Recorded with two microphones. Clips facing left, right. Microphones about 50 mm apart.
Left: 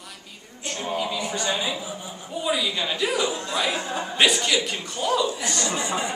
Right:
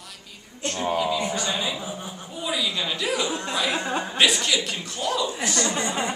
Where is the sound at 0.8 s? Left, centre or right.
Centre.